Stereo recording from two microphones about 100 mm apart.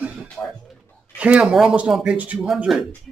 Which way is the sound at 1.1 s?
15° right (ahead or behind).